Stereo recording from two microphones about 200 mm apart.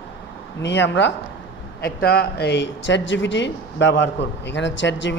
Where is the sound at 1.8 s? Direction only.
50° left (ahead or behind).